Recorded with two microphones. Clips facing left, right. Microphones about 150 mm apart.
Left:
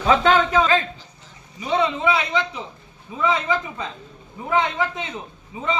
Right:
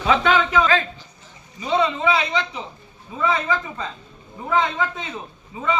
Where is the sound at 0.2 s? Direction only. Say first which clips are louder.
Left 1 dB; 35° left (ahead or behind).